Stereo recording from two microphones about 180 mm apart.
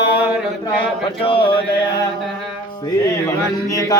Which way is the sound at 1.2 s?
30° left (ahead or behind).